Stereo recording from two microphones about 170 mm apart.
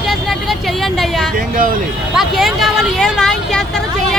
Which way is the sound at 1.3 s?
55° right (ahead or behind).